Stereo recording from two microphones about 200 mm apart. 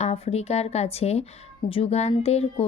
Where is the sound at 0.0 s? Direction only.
30° left (ahead or behind).